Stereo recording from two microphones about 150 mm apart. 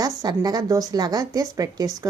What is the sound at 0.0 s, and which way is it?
A woman's voice, 25° right (ahead or behind).